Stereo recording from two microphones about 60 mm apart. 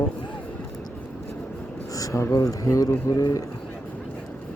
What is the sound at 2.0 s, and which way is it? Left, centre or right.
Speech, left.